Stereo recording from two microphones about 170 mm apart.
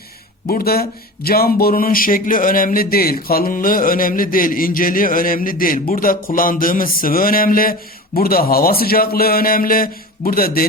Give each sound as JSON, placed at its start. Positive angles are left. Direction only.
{"t": 0.4, "sound": "speech", "side_deg": 65}